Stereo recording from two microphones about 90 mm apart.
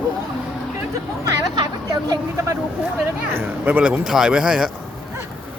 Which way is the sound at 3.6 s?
15° right (ahead or behind).